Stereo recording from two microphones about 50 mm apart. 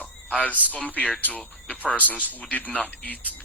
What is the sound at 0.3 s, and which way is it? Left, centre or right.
A man's voice, left.